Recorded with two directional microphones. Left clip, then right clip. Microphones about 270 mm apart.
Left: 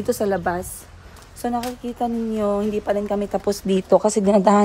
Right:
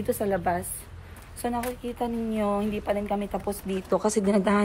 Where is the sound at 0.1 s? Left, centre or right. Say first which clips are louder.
Left 4 dB; centre.